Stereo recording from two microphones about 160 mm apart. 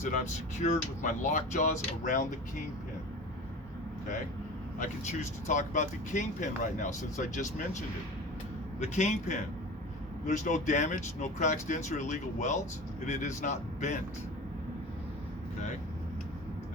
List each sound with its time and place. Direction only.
0.6 s speech: 45° left (ahead or behind)
4.8 s speech: 50° left (ahead or behind)